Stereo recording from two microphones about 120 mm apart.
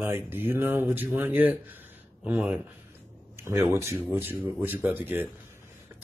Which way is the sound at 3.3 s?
20° right (ahead or behind).